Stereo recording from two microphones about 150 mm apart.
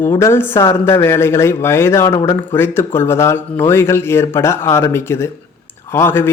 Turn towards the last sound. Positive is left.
turn(degrees=15)  # may be behind; listen again after turning